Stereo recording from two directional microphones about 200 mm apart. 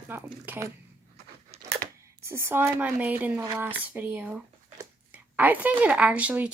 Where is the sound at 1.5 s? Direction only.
30° right (ahead or behind).